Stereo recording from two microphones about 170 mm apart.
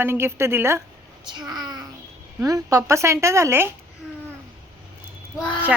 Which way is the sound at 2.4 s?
20° right (ahead or behind).